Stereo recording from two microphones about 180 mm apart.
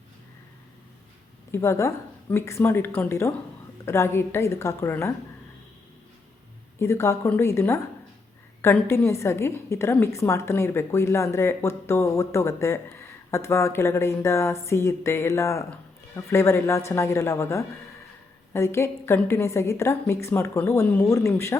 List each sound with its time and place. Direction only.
1.5 s a woman's voice: 15° left (ahead or behind)
6.7 s a woman's voice: 15° left (ahead or behind)